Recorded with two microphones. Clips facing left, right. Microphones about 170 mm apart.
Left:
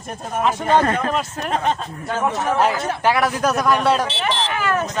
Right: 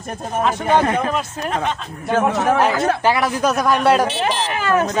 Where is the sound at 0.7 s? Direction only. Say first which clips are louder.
Right 1 dB; 15° right (ahead or behind).